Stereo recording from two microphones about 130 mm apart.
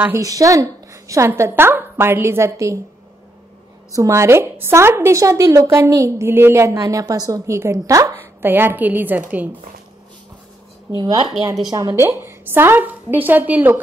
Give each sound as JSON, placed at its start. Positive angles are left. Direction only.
{"t": 0.0, "sound": "a woman's voice", "side_deg": -25}
{"t": 3.9, "sound": "a woman's voice", "side_deg": -25}
{"t": 11.0, "sound": "speech", "side_deg": -35}
{"t": 11.9, "sound": "a woman's voice", "side_deg": -20}